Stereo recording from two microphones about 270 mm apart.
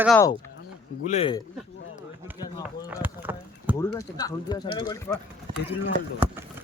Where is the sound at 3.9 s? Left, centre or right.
Centre.